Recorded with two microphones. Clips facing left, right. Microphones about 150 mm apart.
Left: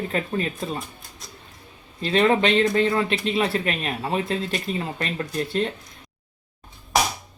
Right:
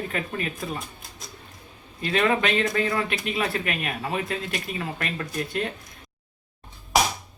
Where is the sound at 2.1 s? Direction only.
30° left (ahead or behind).